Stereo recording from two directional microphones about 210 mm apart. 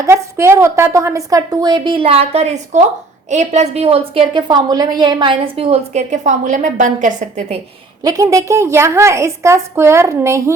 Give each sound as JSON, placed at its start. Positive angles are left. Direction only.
{"t": 0.0, "sound": "a woman's voice", "side_deg": -15}
{"t": 8.0, "sound": "a woman's voice", "side_deg": -15}